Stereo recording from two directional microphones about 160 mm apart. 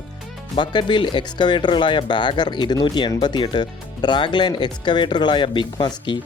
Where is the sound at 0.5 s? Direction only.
30° left (ahead or behind).